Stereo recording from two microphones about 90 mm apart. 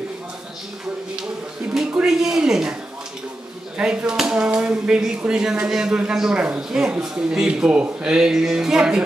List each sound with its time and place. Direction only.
1.7 s speech: 5° right (ahead or behind)
3.7 s speech: 10° right (ahead or behind)